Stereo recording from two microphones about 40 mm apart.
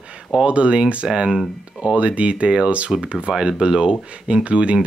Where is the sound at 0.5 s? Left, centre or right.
Right.